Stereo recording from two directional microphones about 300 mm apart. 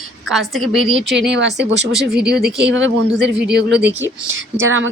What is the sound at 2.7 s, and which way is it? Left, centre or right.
Speech, right.